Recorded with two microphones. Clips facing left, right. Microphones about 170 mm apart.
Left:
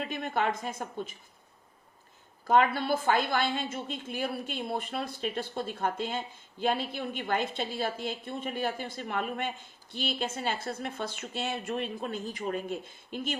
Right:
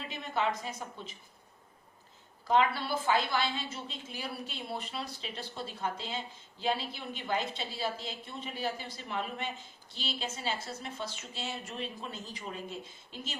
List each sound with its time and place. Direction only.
0.1 s a woman's voice: 55° left (ahead or behind)
2.4 s a woman's voice: 50° left (ahead or behind)